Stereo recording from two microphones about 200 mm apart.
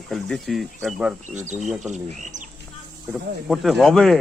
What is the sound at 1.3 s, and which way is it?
Speech, 35° right (ahead or behind).